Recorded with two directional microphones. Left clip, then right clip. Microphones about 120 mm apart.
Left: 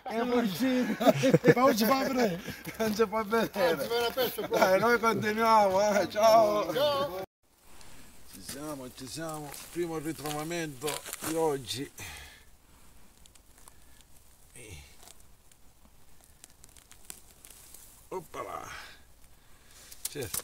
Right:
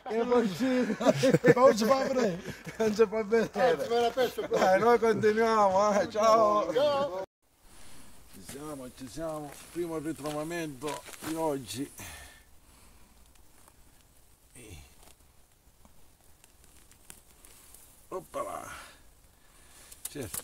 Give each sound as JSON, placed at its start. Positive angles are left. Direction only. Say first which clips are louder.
{"t": 0.0, "sound": "speech", "louder": "right 3 dB", "side_deg": -10}
{"t": 1.1, "sound": "speech", "louder": "even", "side_deg": 5}
{"t": 1.4, "sound": "speech", "louder": "right 2 dB", "side_deg": -15}
{"t": 8.5, "sound": "speech", "louder": "left 2 dB", "side_deg": 45}
{"t": 10.5, "sound": "speech", "louder": "left 1 dB", "side_deg": -10}
{"t": 11.6, "sound": "speech", "louder": "left 2 dB", "side_deg": -25}
{"t": 18.1, "sound": "a sound", "louder": "right 2 dB", "side_deg": -20}